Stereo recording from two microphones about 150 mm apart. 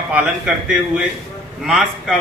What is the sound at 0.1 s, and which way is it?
A man's voice, 10° right (ahead or behind).